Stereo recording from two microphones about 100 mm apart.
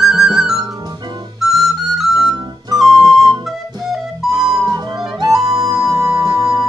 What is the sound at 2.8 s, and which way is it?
Music, centre (ahead or behind).